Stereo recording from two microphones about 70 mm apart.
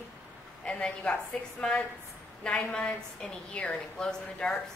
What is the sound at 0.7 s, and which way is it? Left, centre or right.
Speech, centre.